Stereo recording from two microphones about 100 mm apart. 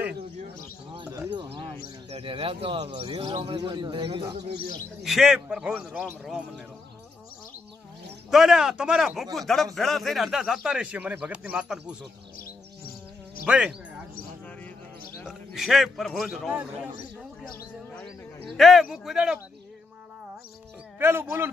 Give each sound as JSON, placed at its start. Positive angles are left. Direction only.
{"t": 1.3, "sound": "bird", "side_deg": -55}
{"t": 3.3, "sound": "speech", "side_deg": -50}
{"t": 5.0, "sound": "a man's voice", "side_deg": -5}
{"t": 8.3, "sound": "a man's voice", "side_deg": -5}
{"t": 13.5, "sound": "a man's voice", "side_deg": -10}
{"t": 15.2, "sound": "a man's voice", "side_deg": -5}
{"t": 18.6, "sound": "a man's voice", "side_deg": 0}
{"t": 21.0, "sound": "speech", "side_deg": -25}